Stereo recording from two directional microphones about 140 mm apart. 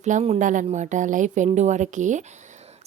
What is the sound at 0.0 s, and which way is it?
A woman's voice, 55° right (ahead or behind).